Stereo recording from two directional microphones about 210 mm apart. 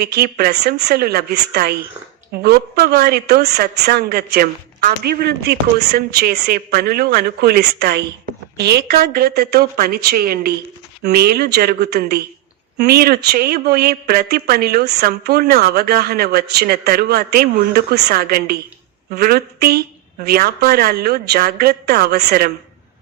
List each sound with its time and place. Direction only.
0.0 s a man's voice: 50° right (ahead or behind)